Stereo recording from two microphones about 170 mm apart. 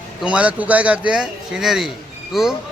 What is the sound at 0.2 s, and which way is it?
A man's voice, 5° right (ahead or behind).